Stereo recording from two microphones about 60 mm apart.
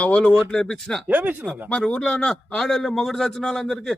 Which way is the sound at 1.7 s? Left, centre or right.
Centre.